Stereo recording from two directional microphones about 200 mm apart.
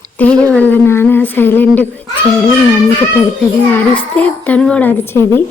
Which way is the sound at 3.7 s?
10° left (ahead or behind).